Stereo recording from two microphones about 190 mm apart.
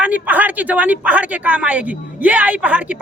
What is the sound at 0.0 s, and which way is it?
Speech, 10° right (ahead or behind).